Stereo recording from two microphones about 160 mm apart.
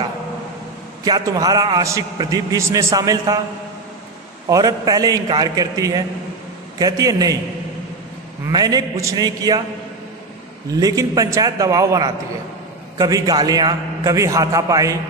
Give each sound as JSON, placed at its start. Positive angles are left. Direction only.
{"t": 1.0, "sound": "a man's voice", "side_deg": -25}
{"t": 4.5, "sound": "a man's voice", "side_deg": -25}
{"t": 8.5, "sound": "a man's voice", "side_deg": -25}
{"t": 10.8, "sound": "a man's voice", "side_deg": -20}